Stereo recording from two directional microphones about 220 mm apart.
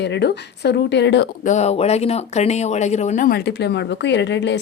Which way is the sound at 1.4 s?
30° left (ahead or behind).